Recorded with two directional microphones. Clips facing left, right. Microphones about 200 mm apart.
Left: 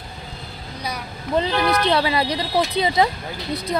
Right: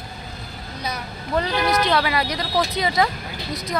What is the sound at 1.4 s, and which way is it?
Speech, 25° left (ahead or behind).